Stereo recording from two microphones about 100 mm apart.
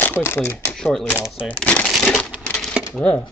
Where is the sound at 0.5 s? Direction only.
5° left (ahead or behind).